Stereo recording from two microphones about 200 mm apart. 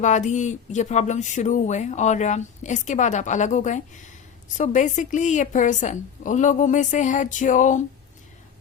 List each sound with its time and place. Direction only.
0.0 s speech: 35° left (ahead or behind)